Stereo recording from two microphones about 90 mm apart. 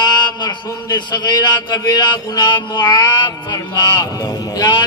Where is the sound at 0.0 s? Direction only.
50° left (ahead or behind).